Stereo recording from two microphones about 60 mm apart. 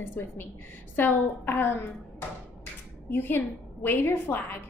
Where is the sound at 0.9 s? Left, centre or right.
Left.